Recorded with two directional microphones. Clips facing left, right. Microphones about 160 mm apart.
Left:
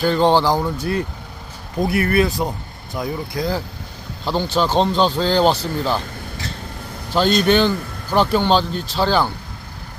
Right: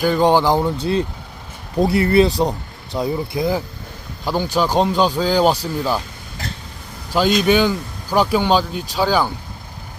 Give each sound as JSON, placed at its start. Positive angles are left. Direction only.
{"t": 0.0, "sound": "speech", "side_deg": -15}
{"t": 4.3, "sound": "speech", "side_deg": -10}
{"t": 7.1, "sound": "speech", "side_deg": -10}